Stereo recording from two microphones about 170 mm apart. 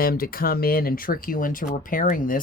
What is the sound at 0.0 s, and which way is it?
Speech, 60° left (ahead or behind).